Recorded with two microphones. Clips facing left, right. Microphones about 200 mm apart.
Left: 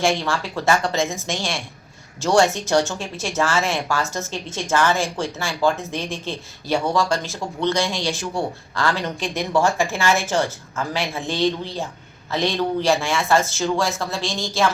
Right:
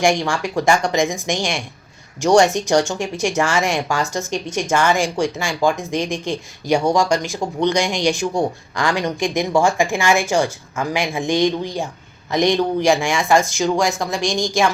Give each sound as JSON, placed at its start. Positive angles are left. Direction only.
{"t": 0.0, "sound": "speech", "side_deg": -15}